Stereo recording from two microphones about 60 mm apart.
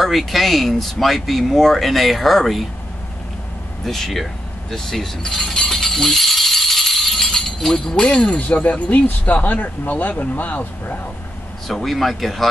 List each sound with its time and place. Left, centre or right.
0.0 s speech: centre
3.8 s a sound: centre
7.2 s speech: centre; by 11.0 s left
11.6 s speech: centre